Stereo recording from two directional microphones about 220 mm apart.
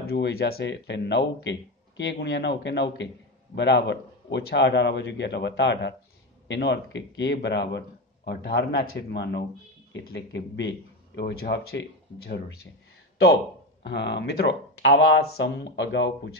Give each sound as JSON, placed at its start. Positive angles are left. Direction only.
{"t": 0.1, "sound": "a man's voice", "side_deg": 45}
{"t": 13.8, "sound": "a man's voice", "side_deg": 50}